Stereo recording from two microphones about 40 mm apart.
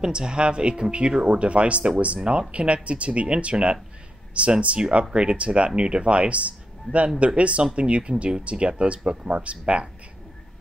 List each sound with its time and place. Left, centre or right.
0.0 s speech: right